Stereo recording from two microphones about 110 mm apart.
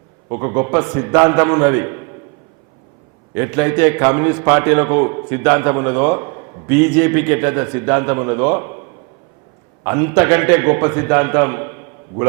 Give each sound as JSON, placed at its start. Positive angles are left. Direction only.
{"t": 0.3, "sound": "a man's voice", "side_deg": -30}
{"t": 3.3, "sound": "a man's voice", "side_deg": -25}
{"t": 9.8, "sound": "a man's voice", "side_deg": -25}